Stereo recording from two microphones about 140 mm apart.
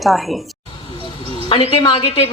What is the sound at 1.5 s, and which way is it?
Speech, 40° left (ahead or behind).